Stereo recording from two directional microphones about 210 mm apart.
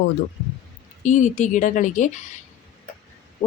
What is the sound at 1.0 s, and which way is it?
Speech, 35° left (ahead or behind).